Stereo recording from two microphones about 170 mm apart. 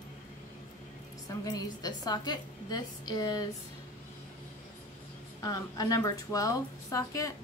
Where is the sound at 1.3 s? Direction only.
20° left (ahead or behind).